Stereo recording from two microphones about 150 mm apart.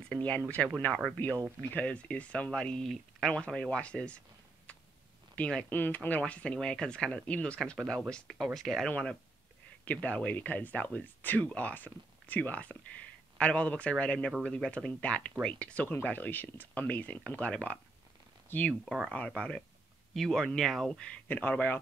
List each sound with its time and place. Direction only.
0.1 s a sound: 10° left (ahead or behind)
0.7 s speech: 5° left (ahead or behind)
5.3 s speech: 5° left (ahead or behind)